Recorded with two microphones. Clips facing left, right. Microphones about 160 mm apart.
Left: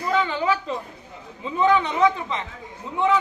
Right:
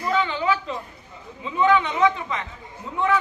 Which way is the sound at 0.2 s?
40° left (ahead or behind).